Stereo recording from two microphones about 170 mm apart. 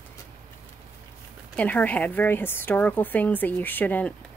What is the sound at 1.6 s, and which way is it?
A woman's voice, 10° left (ahead or behind).